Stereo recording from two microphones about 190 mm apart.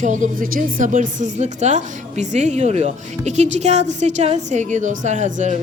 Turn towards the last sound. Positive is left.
turn(degrees=-40)  # may be behind; listen again after turning